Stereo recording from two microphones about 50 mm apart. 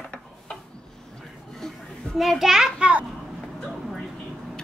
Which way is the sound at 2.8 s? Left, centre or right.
Right.